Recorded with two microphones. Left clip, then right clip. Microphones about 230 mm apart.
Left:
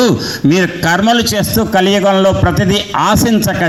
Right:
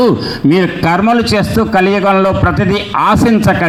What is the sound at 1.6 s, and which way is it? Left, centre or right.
A man's voice, left.